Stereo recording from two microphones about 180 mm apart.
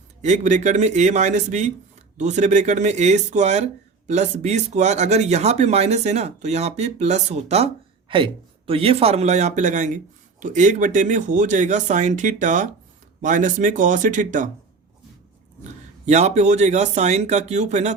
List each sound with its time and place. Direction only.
0.2 s speech: 40° right (ahead or behind)
16.0 s speech: 40° right (ahead or behind)